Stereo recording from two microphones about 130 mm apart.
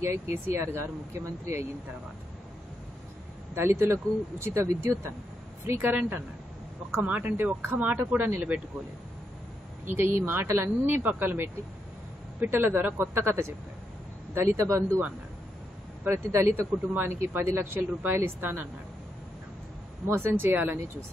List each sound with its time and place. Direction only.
0.0 s speech: 20° right (ahead or behind)
3.5 s speech: 20° right (ahead or behind)
9.8 s speech: 20° right (ahead or behind)
16.0 s speech: 20° right (ahead or behind)
20.1 s speech: 15° right (ahead or behind)